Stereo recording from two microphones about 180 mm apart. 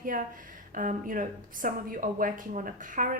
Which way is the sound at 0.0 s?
50° right (ahead or behind).